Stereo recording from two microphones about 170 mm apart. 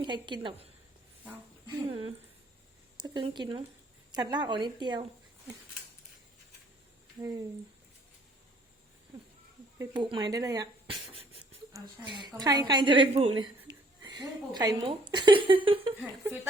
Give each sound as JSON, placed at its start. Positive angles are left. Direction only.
{"t": 0.0, "sound": "speech", "side_deg": -30}
{"t": 9.7, "sound": "speech", "side_deg": -25}
{"t": 13.7, "sound": "a sound", "side_deg": -25}
{"t": 15.1, "sound": "speech", "side_deg": -30}